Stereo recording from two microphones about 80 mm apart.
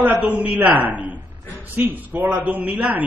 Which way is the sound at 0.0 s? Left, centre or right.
Right.